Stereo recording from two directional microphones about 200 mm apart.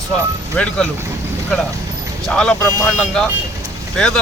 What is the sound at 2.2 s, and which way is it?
Speech, 5° left (ahead or behind).